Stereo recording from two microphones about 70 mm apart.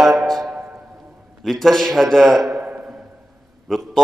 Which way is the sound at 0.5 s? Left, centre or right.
Right.